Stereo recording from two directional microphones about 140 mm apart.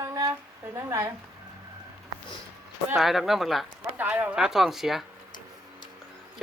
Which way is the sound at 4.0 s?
10° right (ahead or behind).